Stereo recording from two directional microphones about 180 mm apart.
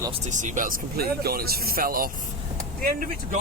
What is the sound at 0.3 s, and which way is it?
Speech, 45° right (ahead or behind).